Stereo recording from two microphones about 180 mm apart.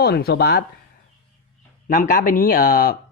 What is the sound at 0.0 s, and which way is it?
Speech, 60° left (ahead or behind).